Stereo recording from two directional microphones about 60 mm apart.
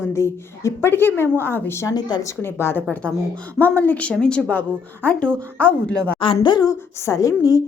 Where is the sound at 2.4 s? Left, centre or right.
Left; by 4.5 s centre.